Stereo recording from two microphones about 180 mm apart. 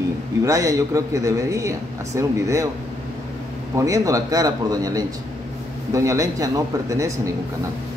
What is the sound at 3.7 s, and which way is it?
A man's voice, 20° right (ahead or behind).